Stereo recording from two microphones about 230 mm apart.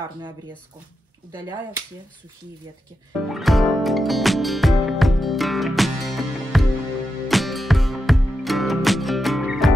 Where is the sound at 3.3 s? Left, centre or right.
Centre.